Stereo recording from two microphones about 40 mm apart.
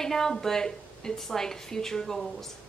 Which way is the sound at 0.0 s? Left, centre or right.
Centre.